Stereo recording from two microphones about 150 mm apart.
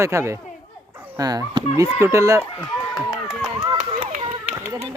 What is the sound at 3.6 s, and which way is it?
Run, 45° right (ahead or behind).